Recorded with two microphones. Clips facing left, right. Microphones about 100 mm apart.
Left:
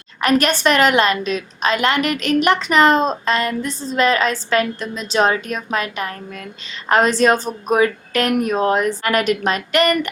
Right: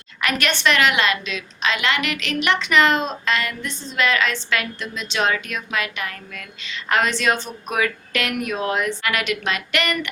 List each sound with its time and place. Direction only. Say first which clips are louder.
0.2 s a woman's voice: left 6 dB; 40° left (ahead or behind)